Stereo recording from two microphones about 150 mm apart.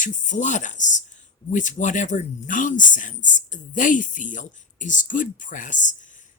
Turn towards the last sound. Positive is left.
turn(degrees=60)  # may be behind; listen again after turning